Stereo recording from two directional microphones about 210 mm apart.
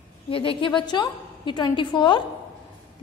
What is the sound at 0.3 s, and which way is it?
A woman's voice, 25° left (ahead or behind).